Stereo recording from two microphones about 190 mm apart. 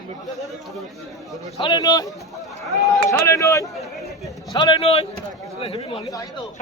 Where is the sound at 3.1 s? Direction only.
15° left (ahead or behind).